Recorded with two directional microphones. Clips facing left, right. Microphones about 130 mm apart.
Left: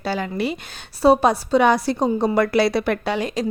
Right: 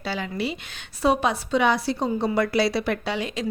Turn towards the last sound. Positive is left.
turn(degrees=40)  # may be behind; listen again after turning